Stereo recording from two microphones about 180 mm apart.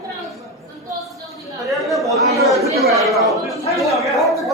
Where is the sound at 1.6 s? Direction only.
Centre (ahead or behind).